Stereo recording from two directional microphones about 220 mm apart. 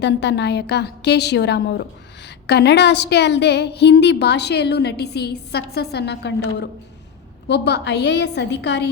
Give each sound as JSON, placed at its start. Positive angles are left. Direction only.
{"t": 0.0, "sound": "a woman's voice", "side_deg": 50}